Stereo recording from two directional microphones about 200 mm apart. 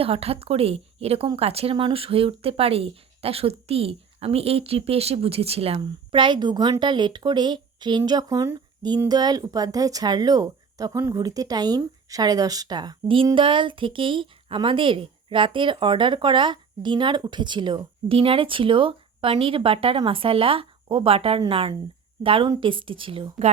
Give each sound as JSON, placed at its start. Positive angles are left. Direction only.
{"t": 0.0, "sound": "speech", "side_deg": -30}